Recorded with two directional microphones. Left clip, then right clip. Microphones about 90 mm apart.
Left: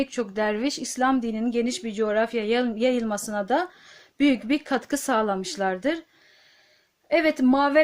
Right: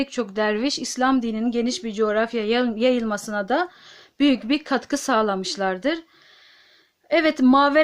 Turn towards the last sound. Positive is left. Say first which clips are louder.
# right 4 dB
turn(degrees=-40)  # may be behind; listen again after turning